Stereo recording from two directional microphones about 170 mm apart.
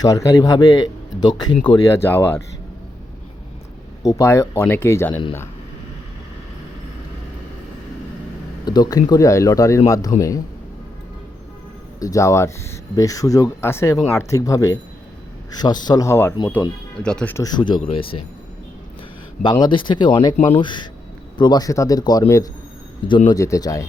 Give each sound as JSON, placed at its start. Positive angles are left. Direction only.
{"t": 0.0, "sound": "speech", "side_deg": 20}
{"t": 1.9, "sound": "speech", "side_deg": 15}
{"t": 4.0, "sound": "speech", "side_deg": 20}
{"t": 8.6, "sound": "speech", "side_deg": 25}
{"t": 11.9, "sound": "speech", "side_deg": 20}
{"t": 17.3, "sound": "speech", "side_deg": 25}
{"t": 19.4, "sound": "speech", "side_deg": 25}